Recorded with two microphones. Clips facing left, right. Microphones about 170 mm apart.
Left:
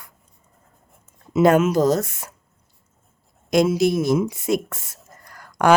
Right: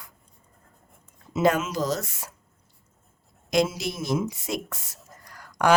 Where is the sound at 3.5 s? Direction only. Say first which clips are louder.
Left 7 dB; 50° left (ahead or behind).